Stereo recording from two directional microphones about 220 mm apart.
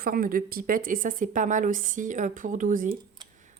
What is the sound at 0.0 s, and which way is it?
A woman's voice, 40° right (ahead or behind).